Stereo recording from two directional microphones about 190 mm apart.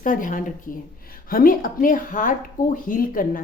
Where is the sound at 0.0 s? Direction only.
45° left (ahead or behind).